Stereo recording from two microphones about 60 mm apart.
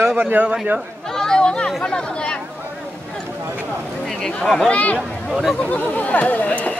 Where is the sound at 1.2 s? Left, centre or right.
Centre.